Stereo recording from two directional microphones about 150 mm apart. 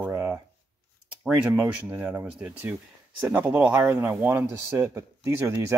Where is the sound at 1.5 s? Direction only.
10° right (ahead or behind).